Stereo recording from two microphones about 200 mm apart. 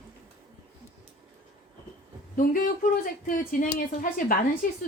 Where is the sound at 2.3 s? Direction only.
45° left (ahead or behind).